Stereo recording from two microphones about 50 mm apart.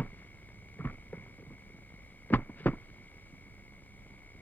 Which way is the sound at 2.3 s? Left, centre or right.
Left.